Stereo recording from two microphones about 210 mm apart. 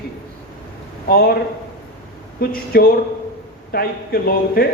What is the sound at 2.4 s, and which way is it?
A man's voice, 45° left (ahead or behind).